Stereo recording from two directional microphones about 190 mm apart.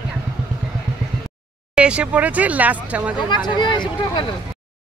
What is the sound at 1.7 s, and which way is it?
Speech, 5° right (ahead or behind).